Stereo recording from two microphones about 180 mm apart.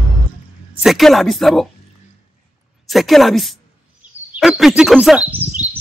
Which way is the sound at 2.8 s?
Centre (ahead or behind).